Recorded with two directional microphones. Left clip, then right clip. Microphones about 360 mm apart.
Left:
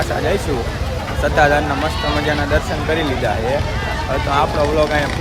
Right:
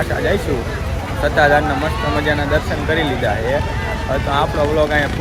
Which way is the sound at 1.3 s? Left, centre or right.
Centre.